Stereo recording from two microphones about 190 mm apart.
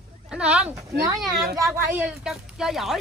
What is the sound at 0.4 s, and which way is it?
Speech, 5° right (ahead or behind).